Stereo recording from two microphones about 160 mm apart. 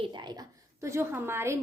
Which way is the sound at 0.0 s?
30° right (ahead or behind).